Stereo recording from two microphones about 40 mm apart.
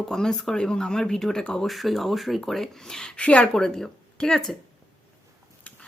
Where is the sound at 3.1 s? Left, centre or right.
Left.